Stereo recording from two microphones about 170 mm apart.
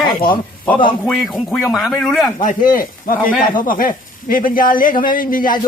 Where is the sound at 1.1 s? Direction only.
Centre (ahead or behind).